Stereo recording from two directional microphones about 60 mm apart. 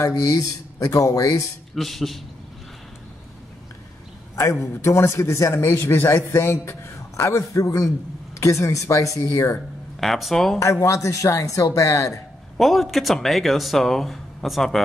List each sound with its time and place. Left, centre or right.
0.0 s speech: left
1.8 s speech: centre
4.4 s a man's voice: left
8.4 s speech: left
9.9 s speech: centre
10.6 s speech: left
12.5 s speech: centre